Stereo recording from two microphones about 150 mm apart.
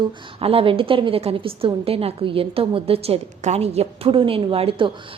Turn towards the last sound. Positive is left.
turn(degrees=-35)  # may be behind; listen again after turning